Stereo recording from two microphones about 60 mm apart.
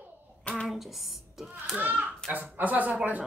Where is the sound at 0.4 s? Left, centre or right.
Centre.